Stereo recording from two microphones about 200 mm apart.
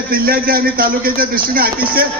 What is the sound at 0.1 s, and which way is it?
A man's voice, 45° right (ahead or behind).